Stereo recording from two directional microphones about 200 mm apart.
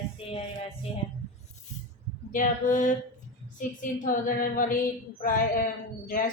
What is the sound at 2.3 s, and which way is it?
A woman's voice, 40° left (ahead or behind).